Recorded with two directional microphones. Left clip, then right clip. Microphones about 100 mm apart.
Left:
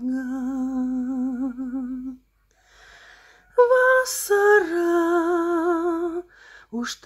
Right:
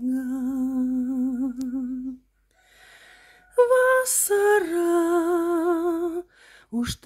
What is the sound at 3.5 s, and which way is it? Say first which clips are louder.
Music: left 2 dB; 35° right (ahead or behind).